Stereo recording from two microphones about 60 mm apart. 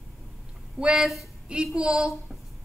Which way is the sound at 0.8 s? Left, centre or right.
Centre.